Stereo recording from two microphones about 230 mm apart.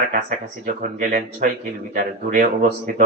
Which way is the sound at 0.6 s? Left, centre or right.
Right.